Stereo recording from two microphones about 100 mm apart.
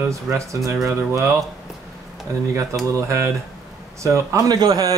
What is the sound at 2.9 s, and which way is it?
A man's voice, 30° right (ahead or behind).